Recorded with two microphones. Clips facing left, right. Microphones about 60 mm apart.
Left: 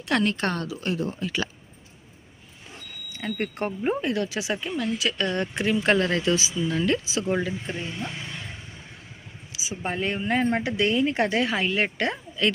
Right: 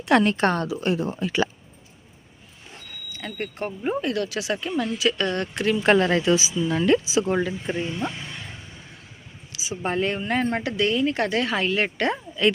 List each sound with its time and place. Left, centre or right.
0.1 s speech: right
3.1 s smoke detector: centre
3.3 s speech: left
4.0 s speech: left
4.8 s speech: centre
5.4 s speech: centre
5.7 s speech: centre
9.5 s speech: centre